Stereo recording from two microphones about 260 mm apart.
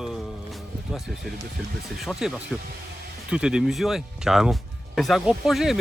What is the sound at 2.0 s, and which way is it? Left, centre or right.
Speech, centre.